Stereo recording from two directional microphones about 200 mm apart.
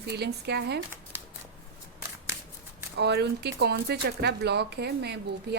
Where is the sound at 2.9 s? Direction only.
55° right (ahead or behind).